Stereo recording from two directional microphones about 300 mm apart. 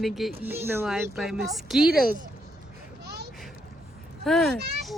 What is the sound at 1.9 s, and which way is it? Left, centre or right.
Speech, right.